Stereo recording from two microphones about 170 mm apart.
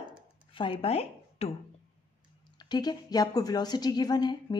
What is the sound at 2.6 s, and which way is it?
A woman's voice, 25° left (ahead or behind).